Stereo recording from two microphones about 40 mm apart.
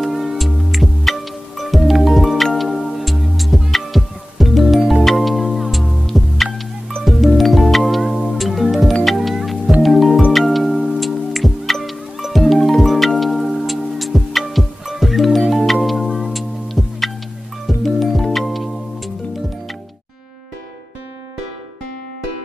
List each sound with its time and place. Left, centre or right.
0.0 s music: centre
0.7 s music: centre
8.0 s music: centre
8.3 s music: centre